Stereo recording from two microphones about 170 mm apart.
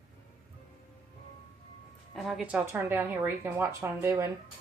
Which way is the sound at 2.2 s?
Centre (ahead or behind).